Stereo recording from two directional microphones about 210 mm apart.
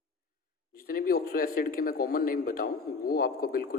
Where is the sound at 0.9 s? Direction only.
45° left (ahead or behind).